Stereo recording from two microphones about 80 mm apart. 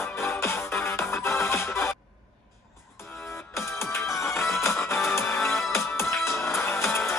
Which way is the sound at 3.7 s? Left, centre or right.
Left.